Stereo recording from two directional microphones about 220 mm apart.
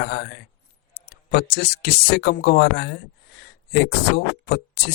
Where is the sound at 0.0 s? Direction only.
50° left (ahead or behind).